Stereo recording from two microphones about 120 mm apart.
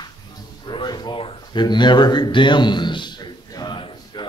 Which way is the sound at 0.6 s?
40° left (ahead or behind).